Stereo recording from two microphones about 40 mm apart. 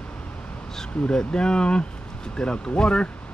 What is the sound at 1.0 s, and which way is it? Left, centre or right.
Speech, left.